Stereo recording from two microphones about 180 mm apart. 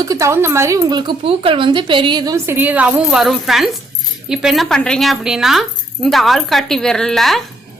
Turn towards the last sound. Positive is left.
turn(degrees=0)  # may be behind; listen again after turning